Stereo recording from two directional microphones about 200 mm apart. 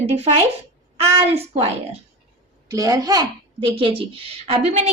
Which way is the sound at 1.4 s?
30° right (ahead or behind).